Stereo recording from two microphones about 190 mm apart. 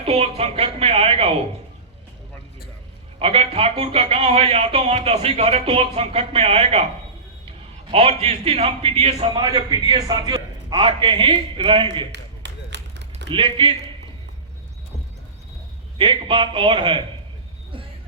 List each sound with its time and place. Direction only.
0.0 s a man's voice: 35° right (ahead or behind)
3.2 s a man's voice: 30° right (ahead or behind)
12.1 s a sound: 65° right (ahead or behind)
13.3 s a man's voice: 25° right (ahead or behind)
16.0 s a man's voice: 25° right (ahead or behind)